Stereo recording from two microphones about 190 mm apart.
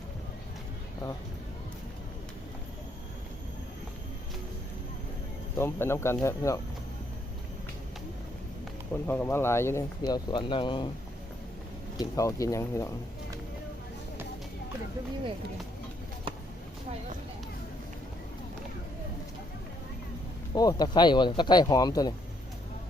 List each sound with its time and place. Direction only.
5.5 s speech: 15° left (ahead or behind)
8.9 s speech: 10° left (ahead or behind)
10.0 s speech: 25° left (ahead or behind)
11.9 s speech: 15° left (ahead or behind)
20.5 s speech: 20° left (ahead or behind)